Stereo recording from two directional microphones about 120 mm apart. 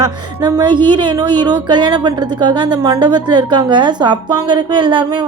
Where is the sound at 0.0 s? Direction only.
35° right (ahead or behind).